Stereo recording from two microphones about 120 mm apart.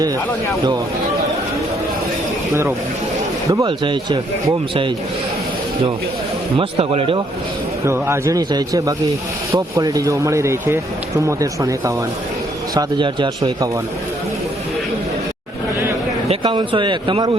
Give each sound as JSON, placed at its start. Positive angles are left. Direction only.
{"t": 3.7, "sound": "a man's voice", "side_deg": -45}
{"t": 6.6, "sound": "a man's voice", "side_deg": -55}
{"t": 7.9, "sound": "speech", "side_deg": -20}
{"t": 12.7, "sound": "a man's voice", "side_deg": -40}
{"t": 16.4, "sound": "a man's voice", "side_deg": -40}